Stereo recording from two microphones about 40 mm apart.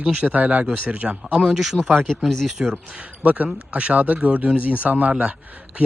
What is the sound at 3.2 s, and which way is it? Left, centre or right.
Speech, right.